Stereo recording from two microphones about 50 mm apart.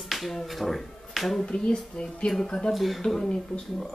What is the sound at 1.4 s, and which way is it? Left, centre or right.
Speech, left.